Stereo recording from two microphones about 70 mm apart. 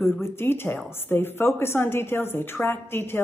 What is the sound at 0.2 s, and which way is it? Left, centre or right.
A woman's voice, left.